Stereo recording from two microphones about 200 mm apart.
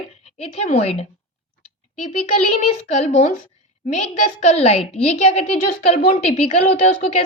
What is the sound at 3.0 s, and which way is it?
Speech, 35° left (ahead or behind).